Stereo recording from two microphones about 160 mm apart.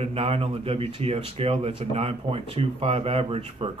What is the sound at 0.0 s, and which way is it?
Speech, 35° right (ahead or behind).